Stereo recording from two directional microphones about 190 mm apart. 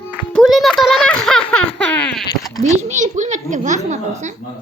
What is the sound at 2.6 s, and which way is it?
A child's voice, 35° right (ahead or behind).